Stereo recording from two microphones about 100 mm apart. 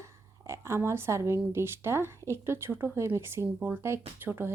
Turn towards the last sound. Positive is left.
turn(degrees=-20)  # may be behind; listen again after turning